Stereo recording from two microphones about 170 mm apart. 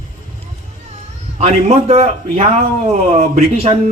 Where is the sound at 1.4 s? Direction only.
40° right (ahead or behind).